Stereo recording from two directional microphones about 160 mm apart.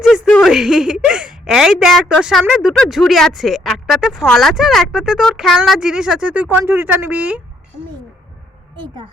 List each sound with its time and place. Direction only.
0.0 s a woman's voice: 5° right (ahead or behind)
8.7 s a woman's voice: 30° right (ahead or behind)